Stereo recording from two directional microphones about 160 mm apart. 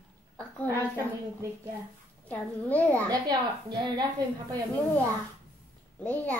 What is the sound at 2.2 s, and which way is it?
Speech, 10° left (ahead or behind).